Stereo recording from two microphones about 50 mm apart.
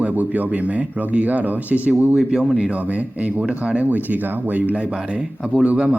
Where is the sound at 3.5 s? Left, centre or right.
Right.